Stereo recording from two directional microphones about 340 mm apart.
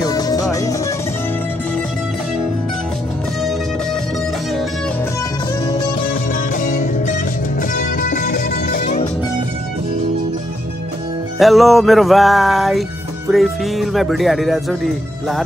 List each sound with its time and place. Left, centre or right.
0.0 s music: centre
6.3 s music: left
11.3 s music: centre
13.3 s speech: centre